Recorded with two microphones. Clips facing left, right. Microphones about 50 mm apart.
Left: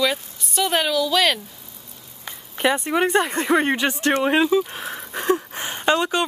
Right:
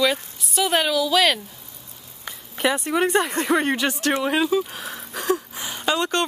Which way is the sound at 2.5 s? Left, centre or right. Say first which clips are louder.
Left 1 dB; centre.